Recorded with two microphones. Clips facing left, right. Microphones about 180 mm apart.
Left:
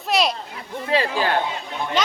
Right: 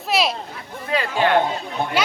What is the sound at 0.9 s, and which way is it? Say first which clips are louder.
Speech: right 2 dB; 35° left (ahead or behind).